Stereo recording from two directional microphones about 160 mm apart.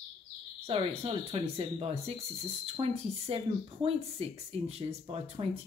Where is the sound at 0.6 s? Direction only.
40° right (ahead or behind).